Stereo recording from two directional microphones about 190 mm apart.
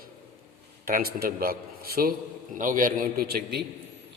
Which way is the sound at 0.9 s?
50° right (ahead or behind).